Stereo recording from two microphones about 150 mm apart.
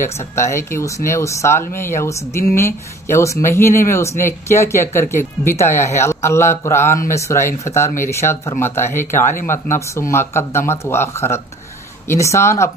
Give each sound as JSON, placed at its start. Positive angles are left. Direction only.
{"t": 0.0, "sound": "speech", "side_deg": 20}